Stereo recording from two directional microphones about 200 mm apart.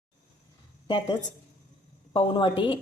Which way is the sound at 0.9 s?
20° left (ahead or behind).